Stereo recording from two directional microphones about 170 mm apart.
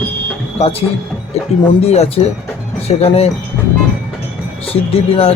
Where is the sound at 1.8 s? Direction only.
40° left (ahead or behind).